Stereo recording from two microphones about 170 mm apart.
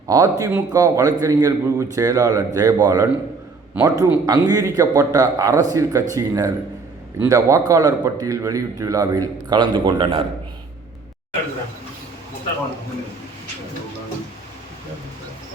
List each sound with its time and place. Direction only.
0.1 s a man's voice: 20° right (ahead or behind)